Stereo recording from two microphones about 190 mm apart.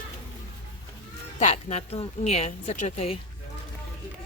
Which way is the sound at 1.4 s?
40° left (ahead or behind).